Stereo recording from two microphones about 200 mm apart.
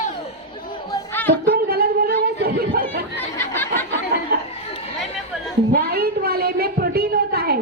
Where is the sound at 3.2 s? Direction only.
10° left (ahead or behind).